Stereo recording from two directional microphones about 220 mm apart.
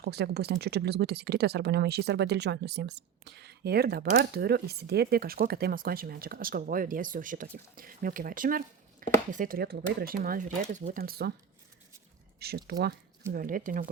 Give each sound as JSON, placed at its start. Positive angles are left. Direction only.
{"t": 0.0, "sound": "speech", "side_deg": -45}
{"t": 12.4, "sound": "speech", "side_deg": -45}